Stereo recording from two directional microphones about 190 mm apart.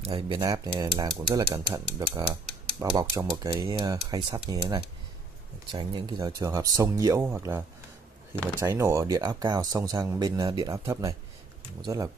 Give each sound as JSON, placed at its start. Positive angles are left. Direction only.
{"t": 0.0, "sound": "speech", "side_deg": -25}